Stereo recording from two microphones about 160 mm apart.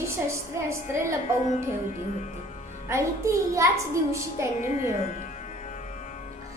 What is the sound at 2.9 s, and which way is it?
Speech, 20° right (ahead or behind).